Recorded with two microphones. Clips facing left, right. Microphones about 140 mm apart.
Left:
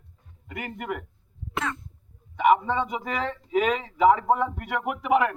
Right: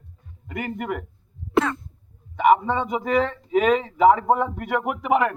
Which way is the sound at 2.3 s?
40° right (ahead or behind).